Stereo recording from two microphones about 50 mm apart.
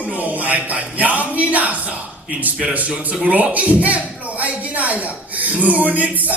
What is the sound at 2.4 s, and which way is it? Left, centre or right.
Speech, right.